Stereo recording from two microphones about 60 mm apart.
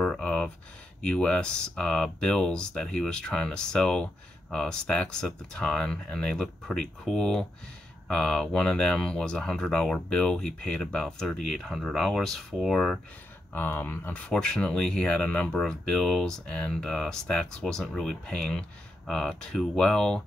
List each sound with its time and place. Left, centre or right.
0.0 s a sound: centre
1.0 s speech: centre
13.5 s speech: left
14.2 s speech: centre